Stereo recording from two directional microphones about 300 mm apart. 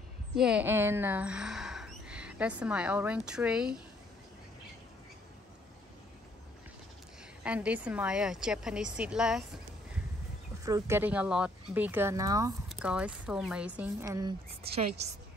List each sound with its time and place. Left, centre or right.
0.4 s speech: centre
7.4 s a woman's voice: centre